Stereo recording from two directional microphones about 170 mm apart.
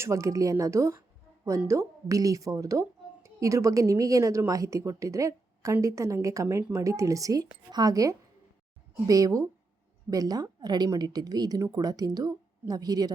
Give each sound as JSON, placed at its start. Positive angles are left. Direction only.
{"t": 0.0, "sound": "a woman's voice", "side_deg": -20}